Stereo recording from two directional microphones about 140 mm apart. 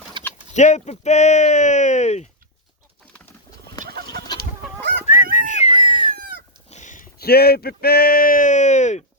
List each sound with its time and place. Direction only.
0.2 s bird: 35° right (ahead or behind)
0.5 s speech: 55° left (ahead or behind)
3.8 s chicken: 90° right
5.0 s a sound: 70° left (ahead or behind); by 6.1 s 40° left (ahead or behind)
6.7 s speech: 60° left (ahead or behind)